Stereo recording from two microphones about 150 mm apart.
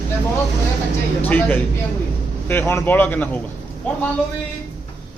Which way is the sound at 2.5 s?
15° left (ahead or behind).